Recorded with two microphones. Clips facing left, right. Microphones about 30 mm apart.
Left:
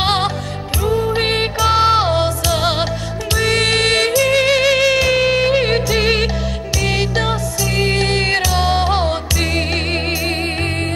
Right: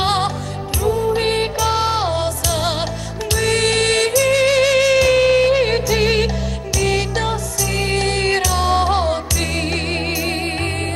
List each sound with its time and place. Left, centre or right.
0.0 s music: left